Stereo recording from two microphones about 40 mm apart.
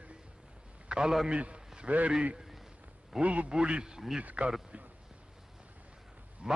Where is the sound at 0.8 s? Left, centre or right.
Right.